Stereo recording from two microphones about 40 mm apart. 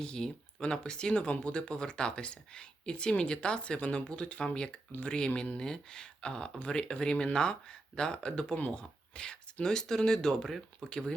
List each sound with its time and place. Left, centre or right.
0.0 s speech: left
8.5 s speech: left
8.8 s speech: left
10.8 s speech: centre